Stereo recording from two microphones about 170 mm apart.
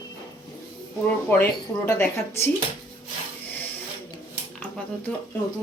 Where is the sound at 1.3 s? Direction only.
15° left (ahead or behind).